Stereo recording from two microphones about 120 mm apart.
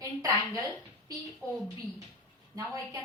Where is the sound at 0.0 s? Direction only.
30° right (ahead or behind).